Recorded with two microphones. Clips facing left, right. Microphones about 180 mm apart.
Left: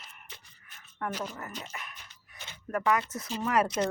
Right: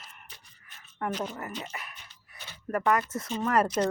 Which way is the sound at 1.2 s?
10° right (ahead or behind).